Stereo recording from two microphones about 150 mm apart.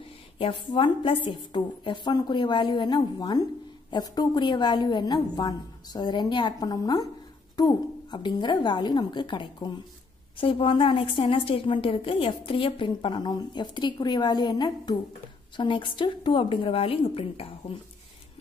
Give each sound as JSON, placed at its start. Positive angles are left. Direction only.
{"t": 0.4, "sound": "a woman's voice", "side_deg": 35}